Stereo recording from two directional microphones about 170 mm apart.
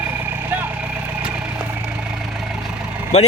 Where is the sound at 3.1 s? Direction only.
40° left (ahead or behind).